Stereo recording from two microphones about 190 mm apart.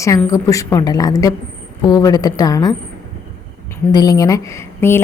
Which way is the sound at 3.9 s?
20° left (ahead or behind).